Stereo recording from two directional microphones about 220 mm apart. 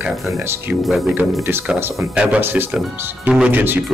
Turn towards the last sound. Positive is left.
turn(degrees=-10)  # may be behind; listen again after turning